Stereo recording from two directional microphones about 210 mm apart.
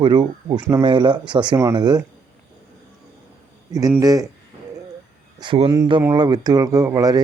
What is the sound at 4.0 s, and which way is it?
Speech, 15° right (ahead or behind).